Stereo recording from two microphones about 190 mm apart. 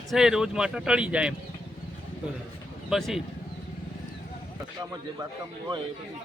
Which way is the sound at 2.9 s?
Centre (ahead or behind).